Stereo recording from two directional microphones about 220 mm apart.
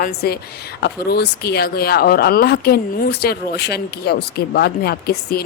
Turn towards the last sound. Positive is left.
turn(degrees=45)  # may be behind; listen again after turning